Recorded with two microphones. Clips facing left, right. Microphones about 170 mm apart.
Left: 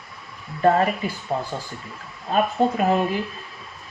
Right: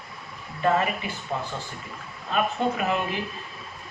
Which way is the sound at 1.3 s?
35° left (ahead or behind).